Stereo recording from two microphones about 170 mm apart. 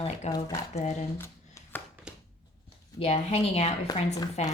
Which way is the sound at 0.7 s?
40° left (ahead or behind).